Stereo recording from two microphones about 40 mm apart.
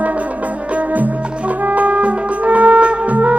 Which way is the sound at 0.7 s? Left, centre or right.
Right.